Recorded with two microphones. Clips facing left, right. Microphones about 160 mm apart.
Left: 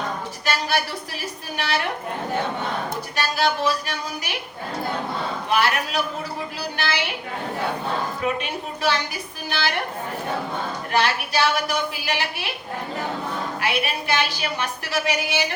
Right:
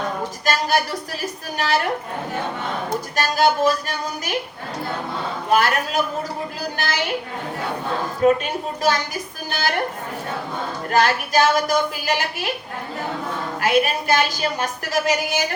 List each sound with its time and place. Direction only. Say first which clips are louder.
0.4 s a woman's voice: right 3 dB; 45° right (ahead or behind)
3.2 s a woman's voice: right 4 dB; 45° right (ahead or behind)
5.5 s a woman's voice: right 4 dB; 45° right (ahead or behind)
8.2 s a woman's voice: right 8 dB; 45° right (ahead or behind)
10.9 s a woman's voice: right 4 dB; 45° right (ahead or behind)
13.6 s a woman's voice: right 9 dB; 45° right (ahead or behind)